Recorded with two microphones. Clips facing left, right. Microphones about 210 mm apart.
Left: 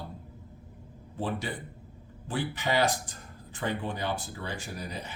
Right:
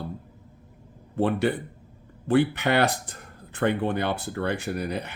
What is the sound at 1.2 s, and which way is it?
Speech, 65° right (ahead or behind).